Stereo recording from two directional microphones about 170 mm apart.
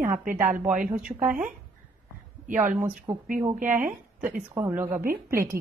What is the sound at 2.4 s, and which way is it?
Speech, 50° right (ahead or behind).